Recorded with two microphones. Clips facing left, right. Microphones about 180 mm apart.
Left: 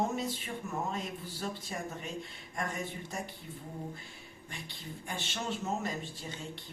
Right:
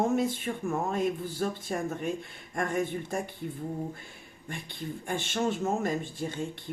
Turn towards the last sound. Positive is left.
turn(degrees=-50)  # may be behind; listen again after turning